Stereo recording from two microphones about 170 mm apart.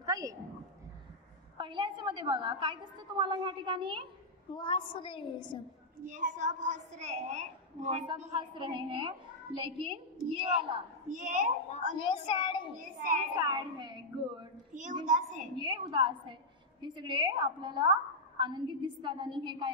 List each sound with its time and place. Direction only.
0.0 s a sound: 20° right (ahead or behind)
1.6 s a woman's voice: 30° right (ahead or behind)
4.6 s a woman's voice: 30° left (ahead or behind)
6.0 s a woman's voice: 45° right (ahead or behind)
8.4 s a woman's voice: 30° right (ahead or behind)
11.1 s a woman's voice: 45° right (ahead or behind)
12.0 s a woman's voice: 30° left (ahead or behind)
12.7 s a woman's voice: 50° right (ahead or behind)
13.4 s a woman's voice: 25° right (ahead or behind)
14.7 s a child's voice: 45° right (ahead or behind)
15.5 s a woman's voice: 25° right (ahead or behind)